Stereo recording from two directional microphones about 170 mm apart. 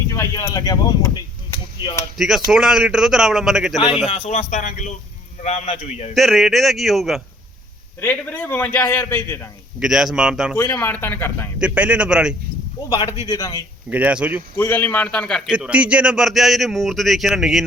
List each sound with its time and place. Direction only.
0.1 s speech: 15° left (ahead or behind)
2.1 s a man's voice: centre (ahead or behind)
3.9 s speech: 35° left (ahead or behind)
4.4 s speech: 50° left (ahead or behind)
6.1 s a man's voice: centre (ahead or behind)
8.0 s a man's voice: 10° left (ahead or behind)
9.8 s a man's voice: 5° right (ahead or behind)
10.5 s a man's voice: 10° left (ahead or behind)
11.6 s a man's voice: 5° right (ahead or behind)
12.9 s a man's voice: 20° left (ahead or behind)
13.9 s speech: 10° right (ahead or behind)
14.5 s a man's voice: 10° left (ahead or behind)